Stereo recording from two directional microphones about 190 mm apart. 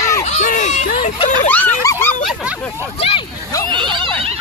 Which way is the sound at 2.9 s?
30° left (ahead or behind).